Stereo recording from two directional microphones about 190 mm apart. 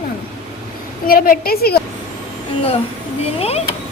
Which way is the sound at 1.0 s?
50° left (ahead or behind).